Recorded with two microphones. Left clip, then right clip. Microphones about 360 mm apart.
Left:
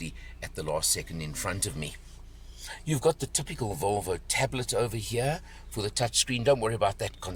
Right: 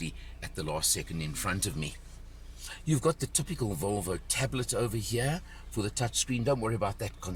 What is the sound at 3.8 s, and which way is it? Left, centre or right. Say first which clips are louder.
Speech: left 6 dB; left.